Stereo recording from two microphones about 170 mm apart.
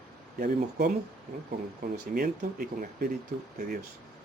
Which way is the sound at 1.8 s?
65° right (ahead or behind).